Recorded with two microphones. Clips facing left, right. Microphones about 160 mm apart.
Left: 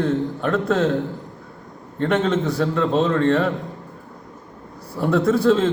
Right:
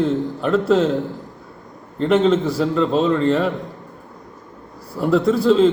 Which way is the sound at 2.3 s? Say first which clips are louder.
Right 3 dB; centre (ahead or behind).